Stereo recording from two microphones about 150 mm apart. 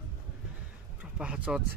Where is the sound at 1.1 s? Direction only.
5° right (ahead or behind).